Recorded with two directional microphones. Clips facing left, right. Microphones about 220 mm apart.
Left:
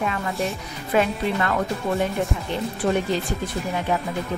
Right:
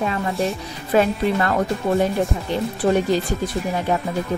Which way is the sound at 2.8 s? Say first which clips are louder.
Right 4 dB; 40° right (ahead or behind).